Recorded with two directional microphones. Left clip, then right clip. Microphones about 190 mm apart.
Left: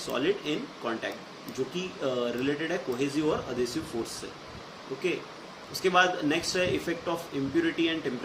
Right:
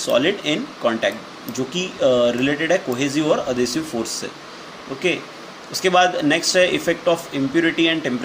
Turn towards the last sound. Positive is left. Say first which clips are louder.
# right 10 dB
turn(degrees=-55)  # may be behind; listen again after turning